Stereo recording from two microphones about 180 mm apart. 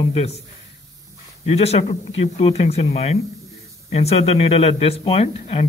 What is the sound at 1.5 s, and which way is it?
A man's voice, 35° left (ahead or behind).